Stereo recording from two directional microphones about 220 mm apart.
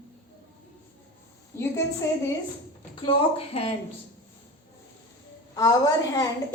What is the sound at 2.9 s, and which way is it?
Speech, 25° left (ahead or behind).